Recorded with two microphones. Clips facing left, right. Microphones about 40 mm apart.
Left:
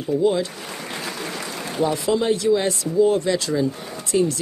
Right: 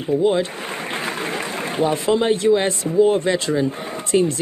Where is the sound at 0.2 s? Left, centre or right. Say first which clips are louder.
Right 1 dB; right.